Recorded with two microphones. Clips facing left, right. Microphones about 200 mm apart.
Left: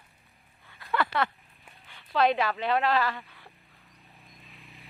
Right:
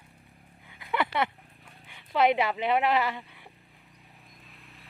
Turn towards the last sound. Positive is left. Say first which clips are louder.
# left 1 dB
turn(degrees=0)  # may be behind; listen again after turning